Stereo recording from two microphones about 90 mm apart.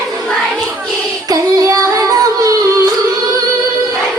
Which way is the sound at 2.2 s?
45° right (ahead or behind).